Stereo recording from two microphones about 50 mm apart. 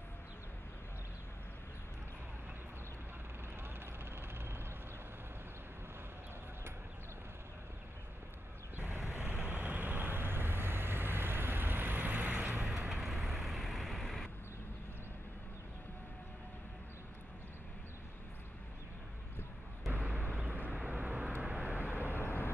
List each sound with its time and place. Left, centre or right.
3.6 s vehicle: right
8.7 s vehicle: right
12.9 s vehicle: centre
20.3 s vehicle: right
22.0 s vehicle: left